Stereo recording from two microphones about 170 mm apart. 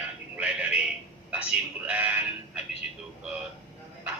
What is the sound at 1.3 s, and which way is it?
Speech, 10° right (ahead or behind).